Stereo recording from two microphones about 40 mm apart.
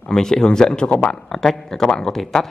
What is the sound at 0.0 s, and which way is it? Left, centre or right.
Speech, centre.